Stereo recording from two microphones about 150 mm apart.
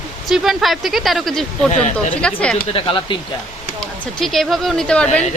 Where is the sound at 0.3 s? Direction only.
Centre (ahead or behind).